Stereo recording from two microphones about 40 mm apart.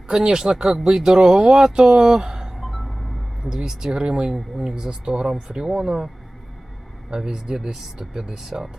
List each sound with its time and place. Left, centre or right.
0.1 s speech: centre
2.6 s music: centre
3.4 s speech: centre
7.1 s speech: centre